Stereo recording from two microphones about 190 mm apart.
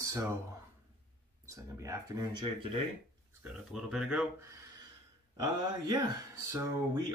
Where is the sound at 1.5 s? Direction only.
15° right (ahead or behind).